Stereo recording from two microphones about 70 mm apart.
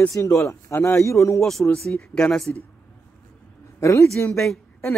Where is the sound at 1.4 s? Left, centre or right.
Centre.